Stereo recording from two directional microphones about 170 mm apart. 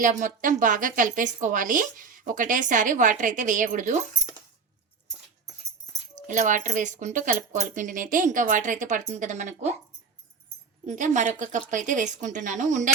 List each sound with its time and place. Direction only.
0.0 s a woman's voice: 50° right (ahead or behind)
6.2 s a woman's voice: 50° right (ahead or behind)
10.8 s a woman's voice: 45° right (ahead or behind)